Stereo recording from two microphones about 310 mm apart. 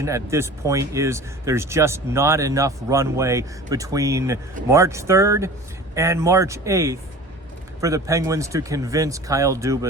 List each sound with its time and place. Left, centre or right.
0.0 s speech: centre